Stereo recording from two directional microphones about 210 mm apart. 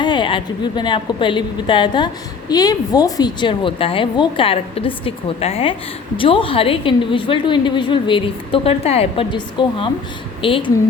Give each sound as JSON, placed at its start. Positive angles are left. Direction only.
{"t": 0.0, "sound": "a woman's voice", "side_deg": 20}